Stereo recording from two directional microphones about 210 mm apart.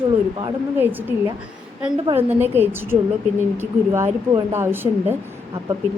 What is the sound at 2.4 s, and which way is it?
Speech, 10° right (ahead or behind).